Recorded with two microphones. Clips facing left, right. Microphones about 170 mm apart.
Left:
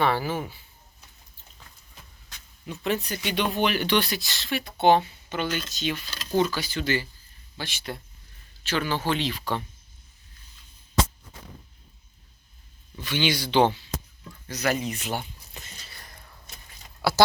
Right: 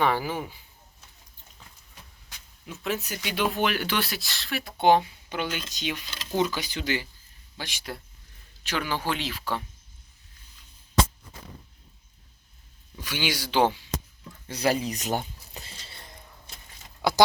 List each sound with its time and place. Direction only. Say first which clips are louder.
0.0 s speech: left 1 dB; 15° right (ahead or behind)
2.6 s speech: left 3 dB; centre (ahead or behind)
4.8 s speech: left 1 dB; 10° right (ahead or behind)
13.0 s speech: left 4 dB; 10° right (ahead or behind)
14.4 s a sound: right 1 dB; 30° right (ahead or behind)